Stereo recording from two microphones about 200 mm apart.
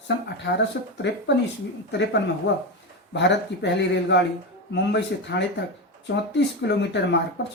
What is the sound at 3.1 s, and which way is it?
Speech, 60° left (ahead or behind).